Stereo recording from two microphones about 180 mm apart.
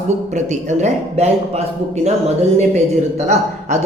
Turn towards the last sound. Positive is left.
turn(degrees=-40)  # may be behind; listen again after turning